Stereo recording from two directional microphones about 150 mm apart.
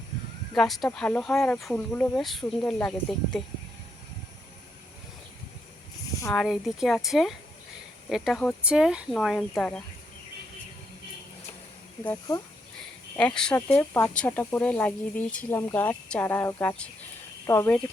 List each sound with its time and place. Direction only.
0.5 s speech: centre (ahead or behind)
6.3 s speech: centre (ahead or behind)
13.1 s speech: 5° left (ahead or behind)